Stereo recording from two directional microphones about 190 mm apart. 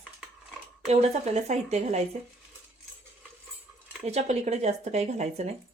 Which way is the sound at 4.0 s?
35° right (ahead or behind).